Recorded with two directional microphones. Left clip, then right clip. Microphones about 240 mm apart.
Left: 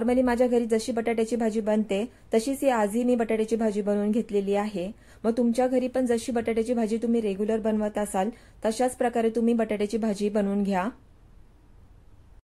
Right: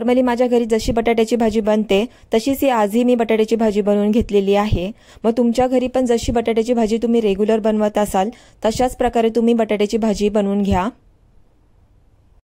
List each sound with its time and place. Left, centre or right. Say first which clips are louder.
0.0 s speech: right 7 dB; right